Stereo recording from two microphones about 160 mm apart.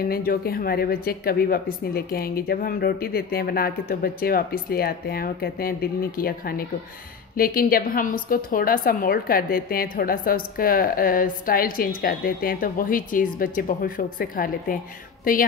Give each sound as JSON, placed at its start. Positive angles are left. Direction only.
{"t": 0.1, "sound": "a woman's voice", "side_deg": 70}